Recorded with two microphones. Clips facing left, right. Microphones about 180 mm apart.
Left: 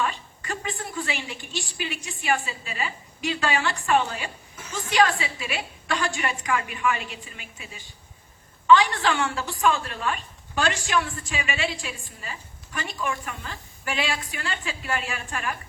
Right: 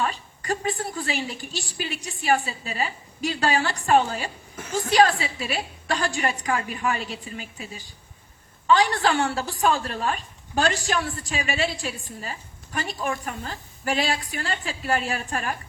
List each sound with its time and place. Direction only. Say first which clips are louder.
0.0 s a woman's voice: right 1 dB; 35° right (ahead or behind)